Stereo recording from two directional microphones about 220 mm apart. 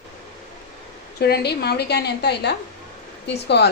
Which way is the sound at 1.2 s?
45° left (ahead or behind).